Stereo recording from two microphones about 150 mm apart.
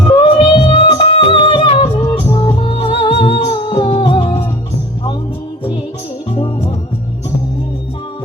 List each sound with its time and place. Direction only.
0.1 s music: 35° left (ahead or behind)
2.1 s music: 25° left (ahead or behind)
2.6 s music: 40° left (ahead or behind)
6.3 s music: 35° left (ahead or behind)